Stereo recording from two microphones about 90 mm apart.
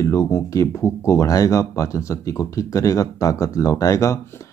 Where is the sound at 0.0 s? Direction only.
35° left (ahead or behind).